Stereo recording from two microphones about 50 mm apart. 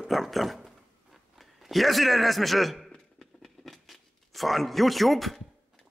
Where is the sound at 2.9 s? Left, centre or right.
Centre.